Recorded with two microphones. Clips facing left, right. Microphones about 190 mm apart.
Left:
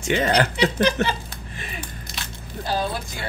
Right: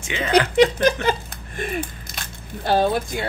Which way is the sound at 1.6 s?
50° right (ahead or behind).